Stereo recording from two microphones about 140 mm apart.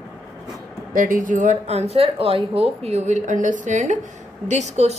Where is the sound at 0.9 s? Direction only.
70° right (ahead or behind).